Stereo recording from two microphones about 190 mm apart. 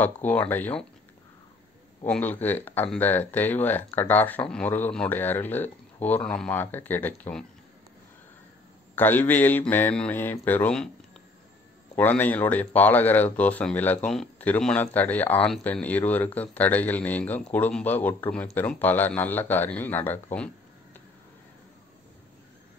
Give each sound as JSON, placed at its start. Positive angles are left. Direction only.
{"t": 0.0, "sound": "speech", "side_deg": 10}
{"t": 2.0, "sound": "speech", "side_deg": 10}
{"t": 8.9, "sound": "speech", "side_deg": 10}
{"t": 11.9, "sound": "speech", "side_deg": 10}